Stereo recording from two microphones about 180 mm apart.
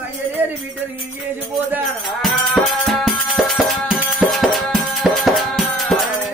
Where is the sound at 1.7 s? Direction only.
Centre (ahead or behind).